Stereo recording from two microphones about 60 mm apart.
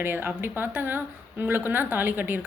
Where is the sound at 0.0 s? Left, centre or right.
Right.